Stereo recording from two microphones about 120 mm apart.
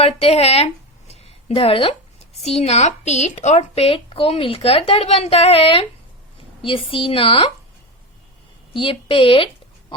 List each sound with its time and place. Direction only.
0.0 s speech: 60° left (ahead or behind)
2.4 s a woman's voice: 65° left (ahead or behind)
8.7 s a woman's voice: 50° left (ahead or behind)